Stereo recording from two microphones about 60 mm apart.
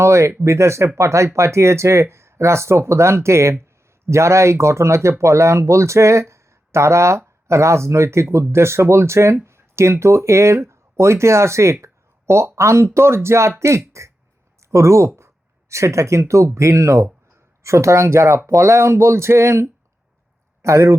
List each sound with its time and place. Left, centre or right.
0.0 s speech: right